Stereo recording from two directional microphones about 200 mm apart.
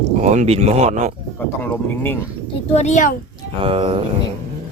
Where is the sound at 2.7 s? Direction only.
35° left (ahead or behind).